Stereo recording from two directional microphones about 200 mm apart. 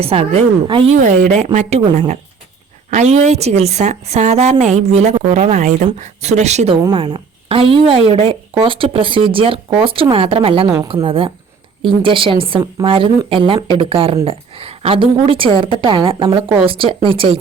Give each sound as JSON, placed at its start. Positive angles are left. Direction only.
{"t": 0.0, "sound": "a woman's voice", "side_deg": -30}
{"t": 2.9, "sound": "a woman's voice", "side_deg": -35}
{"t": 6.8, "sound": "a woman's voice", "side_deg": -20}